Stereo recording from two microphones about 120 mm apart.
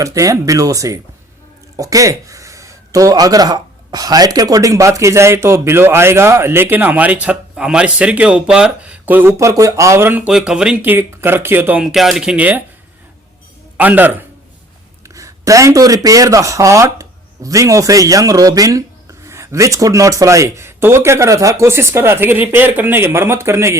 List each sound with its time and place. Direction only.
0.0 s speech: 25° right (ahead or behind)
11.8 s speech: centre (ahead or behind)
13.7 s speech: 15° right (ahead or behind)
15.1 s speech: 25° right (ahead or behind)